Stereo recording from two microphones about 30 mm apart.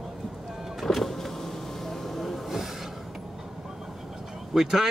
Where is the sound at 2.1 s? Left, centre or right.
Centre.